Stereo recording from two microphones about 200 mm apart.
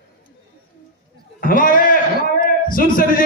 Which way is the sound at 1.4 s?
45° left (ahead or behind).